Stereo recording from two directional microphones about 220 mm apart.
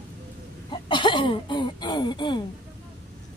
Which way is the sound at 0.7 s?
20° left (ahead or behind).